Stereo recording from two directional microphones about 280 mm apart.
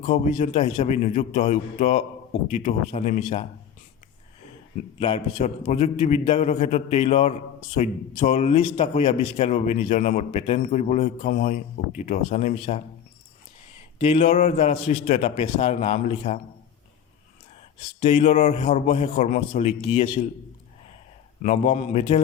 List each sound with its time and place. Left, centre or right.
0.0 s a man's voice: left
4.9 s a man's voice: centre
14.0 s a man's voice: left
18.0 s a man's voice: left
21.4 s a man's voice: left